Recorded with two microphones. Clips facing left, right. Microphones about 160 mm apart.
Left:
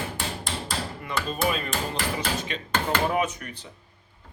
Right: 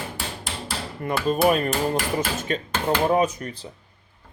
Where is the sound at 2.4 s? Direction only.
45° right (ahead or behind).